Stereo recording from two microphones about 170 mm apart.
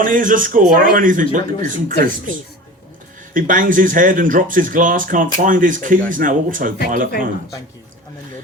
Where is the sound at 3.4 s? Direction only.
50° right (ahead or behind).